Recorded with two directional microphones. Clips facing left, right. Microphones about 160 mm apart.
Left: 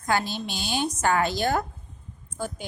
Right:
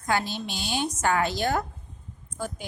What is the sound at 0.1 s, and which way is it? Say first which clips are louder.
A woman's voice: left 1 dB; 40° left (ahead or behind).